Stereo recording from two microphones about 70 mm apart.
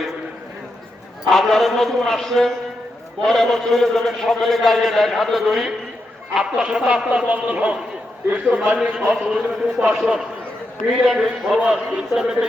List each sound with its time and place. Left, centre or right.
1.3 s a man's voice: centre